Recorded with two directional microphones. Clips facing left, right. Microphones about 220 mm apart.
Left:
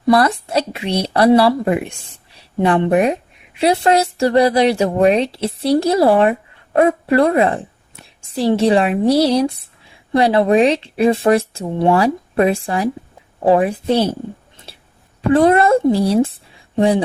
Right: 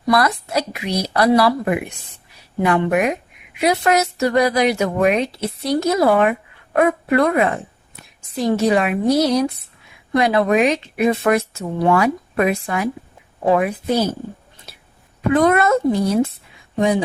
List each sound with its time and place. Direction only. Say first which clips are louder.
0.0 s a woman's voice: left 4 dB; 30° left (ahead or behind)
14.7 s a sound: left 3 dB; 30° left (ahead or behind)
15.3 s a woman's voice: left 3 dB; 30° left (ahead or behind)